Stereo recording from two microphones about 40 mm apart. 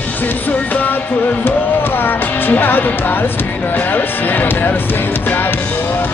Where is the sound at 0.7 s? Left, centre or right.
Left.